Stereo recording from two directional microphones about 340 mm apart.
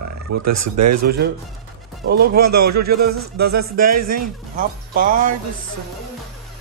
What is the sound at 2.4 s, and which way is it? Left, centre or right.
Speech, right.